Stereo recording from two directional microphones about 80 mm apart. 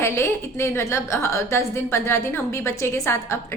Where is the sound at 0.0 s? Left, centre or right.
Left.